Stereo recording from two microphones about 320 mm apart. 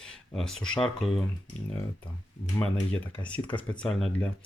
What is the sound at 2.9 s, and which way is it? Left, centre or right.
Speech, centre.